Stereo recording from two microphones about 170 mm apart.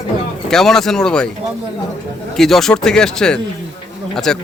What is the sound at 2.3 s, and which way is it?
A man's voice, centre (ahead or behind).